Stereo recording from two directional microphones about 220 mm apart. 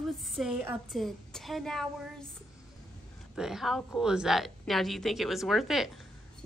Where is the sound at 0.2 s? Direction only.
Centre (ahead or behind).